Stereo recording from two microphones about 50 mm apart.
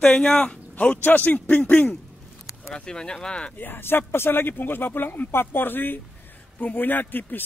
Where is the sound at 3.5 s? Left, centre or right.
Left.